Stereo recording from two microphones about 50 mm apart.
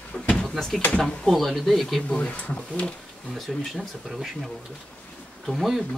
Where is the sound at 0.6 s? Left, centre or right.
Centre.